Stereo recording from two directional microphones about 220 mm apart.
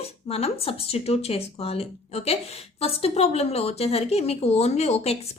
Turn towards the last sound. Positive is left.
turn(degrees=30)  # may be behind; listen again after turning